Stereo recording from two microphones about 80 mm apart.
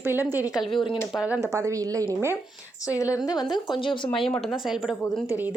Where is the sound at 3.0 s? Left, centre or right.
Left.